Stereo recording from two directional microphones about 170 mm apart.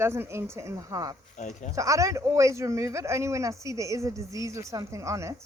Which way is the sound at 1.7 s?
20° right (ahead or behind).